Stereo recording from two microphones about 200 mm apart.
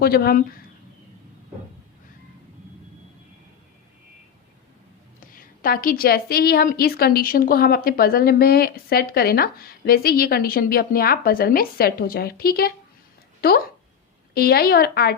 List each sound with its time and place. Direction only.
0.0 s a woman's voice: 50° left (ahead or behind)
5.3 s a woman's voice: 45° left (ahead or behind)
14.3 s a woman's voice: 50° left (ahead or behind)